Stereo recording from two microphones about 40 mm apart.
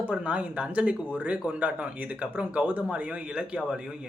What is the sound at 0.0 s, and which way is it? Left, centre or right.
Speech, right.